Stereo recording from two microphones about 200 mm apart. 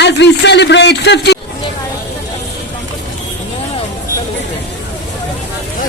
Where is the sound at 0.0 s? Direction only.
60° left (ahead or behind).